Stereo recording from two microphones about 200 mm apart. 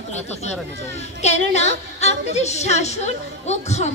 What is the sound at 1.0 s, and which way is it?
A woman's voice, 35° left (ahead or behind).